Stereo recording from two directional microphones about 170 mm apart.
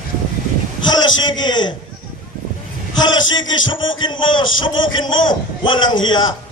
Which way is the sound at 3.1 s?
90° left.